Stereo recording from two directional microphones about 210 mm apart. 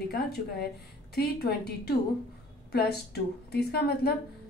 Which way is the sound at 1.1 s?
50° left (ahead or behind).